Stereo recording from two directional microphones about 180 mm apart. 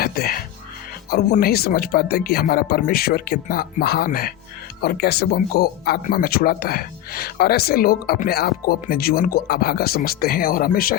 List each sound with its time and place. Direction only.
0.0 s music: 55° left (ahead or behind)
1.1 s speech: 55° left (ahead or behind)